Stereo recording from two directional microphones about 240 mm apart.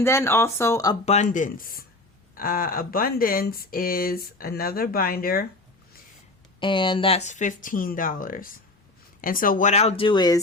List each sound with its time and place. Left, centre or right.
0.0 s speech: centre
1.0 s speech: left
6.6 s speech: left